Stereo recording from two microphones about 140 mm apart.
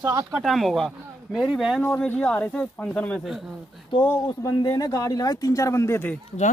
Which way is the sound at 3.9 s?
30° left (ahead or behind).